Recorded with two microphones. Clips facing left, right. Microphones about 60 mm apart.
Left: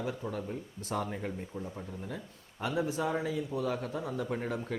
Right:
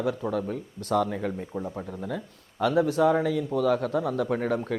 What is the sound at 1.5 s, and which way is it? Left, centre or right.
Speech, right.